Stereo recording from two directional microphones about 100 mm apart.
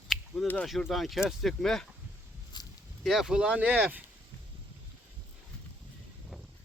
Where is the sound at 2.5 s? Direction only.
45° left (ahead or behind).